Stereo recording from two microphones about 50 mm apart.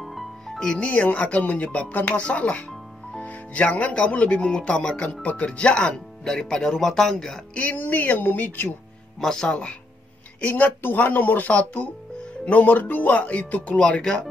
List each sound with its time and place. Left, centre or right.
0.0 s music: centre
0.7 s speech: left
2.2 s speech: left
5.2 s speech: left; by 7.4 s centre
7.5 s music: left
9.2 s speech: centre
9.5 s speech: left
10.4 s music: left
13.7 s speech: left